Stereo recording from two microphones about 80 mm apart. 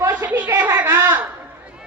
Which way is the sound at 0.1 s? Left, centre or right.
Centre.